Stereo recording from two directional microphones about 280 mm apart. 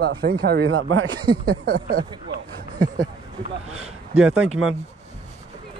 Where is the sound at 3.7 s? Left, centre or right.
Right.